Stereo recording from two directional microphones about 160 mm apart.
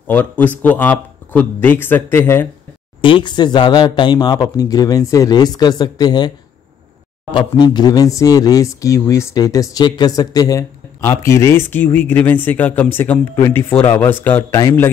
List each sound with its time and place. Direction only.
0.1 s speech: 10° left (ahead or behind)
3.0 s speech: 30° left (ahead or behind); by 14.9 s 15° left (ahead or behind)